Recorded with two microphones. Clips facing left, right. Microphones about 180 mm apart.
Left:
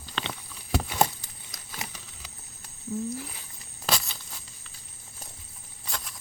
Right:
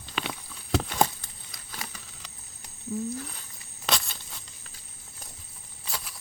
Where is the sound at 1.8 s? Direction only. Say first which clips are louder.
Left 1 dB; 20° left (ahead or behind).